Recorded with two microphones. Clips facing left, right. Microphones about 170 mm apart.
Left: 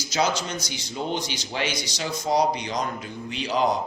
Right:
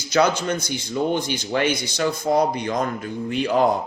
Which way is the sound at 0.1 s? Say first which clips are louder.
Right 6 dB; 55° right (ahead or behind).